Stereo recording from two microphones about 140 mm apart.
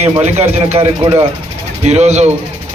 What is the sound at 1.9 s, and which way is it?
Speech, 55° right (ahead or behind).